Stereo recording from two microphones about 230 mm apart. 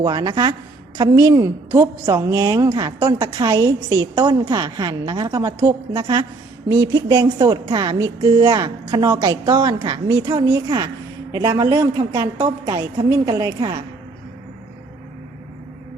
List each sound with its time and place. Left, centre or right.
0.0 s a woman's voice: centre